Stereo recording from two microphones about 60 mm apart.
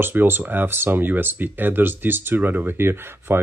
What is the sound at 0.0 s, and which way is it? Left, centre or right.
Speech, right.